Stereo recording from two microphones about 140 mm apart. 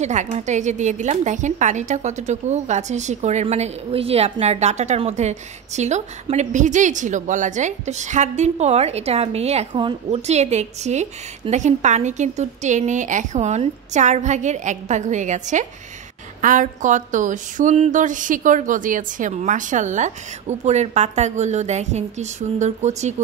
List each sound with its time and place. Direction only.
0.0 s a woman's voice: 55° right (ahead or behind)
9.8 s a woman's voice: 35° right (ahead or behind)
10.2 s a woman's voice: 50° right (ahead or behind)